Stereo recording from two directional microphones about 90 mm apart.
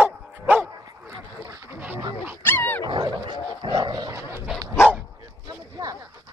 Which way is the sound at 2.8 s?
55° right (ahead or behind).